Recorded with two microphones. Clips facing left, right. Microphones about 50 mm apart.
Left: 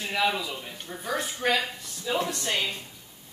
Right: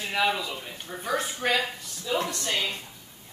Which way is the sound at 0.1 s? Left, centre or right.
Centre.